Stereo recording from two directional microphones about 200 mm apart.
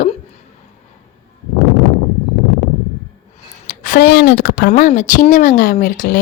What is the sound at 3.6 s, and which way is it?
Speech, 40° left (ahead or behind).